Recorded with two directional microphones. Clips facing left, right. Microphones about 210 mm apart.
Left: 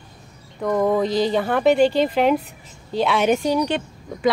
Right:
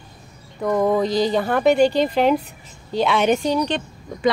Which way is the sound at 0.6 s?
Centre (ahead or behind).